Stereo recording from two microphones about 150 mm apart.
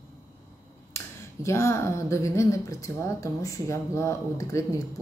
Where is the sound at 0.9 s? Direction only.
20° left (ahead or behind).